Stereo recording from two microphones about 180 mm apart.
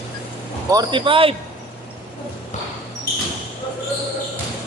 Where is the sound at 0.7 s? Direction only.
25° right (ahead or behind).